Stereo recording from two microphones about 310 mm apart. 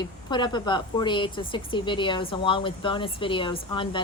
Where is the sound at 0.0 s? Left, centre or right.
Centre.